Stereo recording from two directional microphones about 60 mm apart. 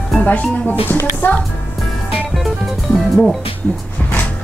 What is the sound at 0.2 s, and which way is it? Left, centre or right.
Speech, left.